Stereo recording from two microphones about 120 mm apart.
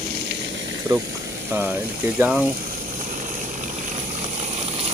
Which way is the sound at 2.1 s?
15° right (ahead or behind).